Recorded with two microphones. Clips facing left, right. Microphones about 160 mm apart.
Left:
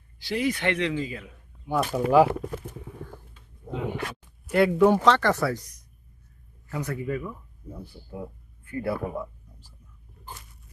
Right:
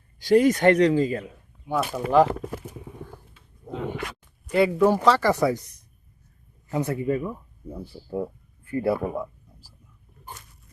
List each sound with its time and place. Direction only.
0.2 s speech: 45° right (ahead or behind)
1.6 s speech: centre (ahead or behind)
4.4 s speech: 5° left (ahead or behind); by 5.5 s 15° right (ahead or behind)
6.7 s speech: 25° right (ahead or behind)